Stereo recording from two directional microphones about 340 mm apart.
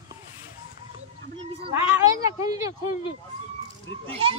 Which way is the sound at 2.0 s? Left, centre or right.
Centre.